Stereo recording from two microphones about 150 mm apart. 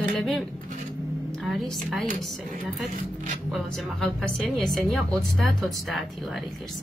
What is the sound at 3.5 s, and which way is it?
A woman's voice, centre (ahead or behind).